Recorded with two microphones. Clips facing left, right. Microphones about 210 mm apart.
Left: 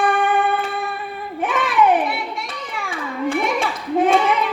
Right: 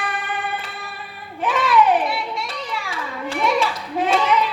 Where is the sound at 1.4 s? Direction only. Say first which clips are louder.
Right 2 dB; 55° left (ahead or behind).